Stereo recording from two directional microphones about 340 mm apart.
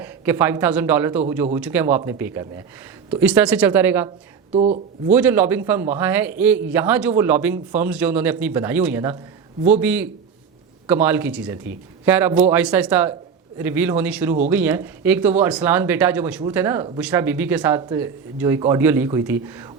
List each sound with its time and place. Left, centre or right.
0.0 s a man's voice: centre
4.5 s speech: centre
5.1 s speech: centre